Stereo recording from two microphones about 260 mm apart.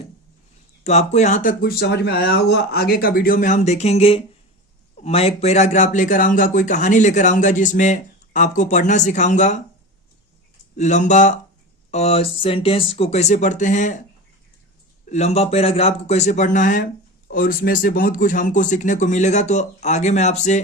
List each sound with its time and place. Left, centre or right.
0.9 s speech: left
10.8 s speech: left
15.1 s speech: left